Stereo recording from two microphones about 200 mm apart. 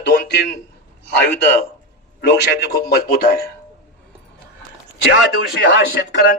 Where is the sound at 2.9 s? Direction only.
50° left (ahead or behind).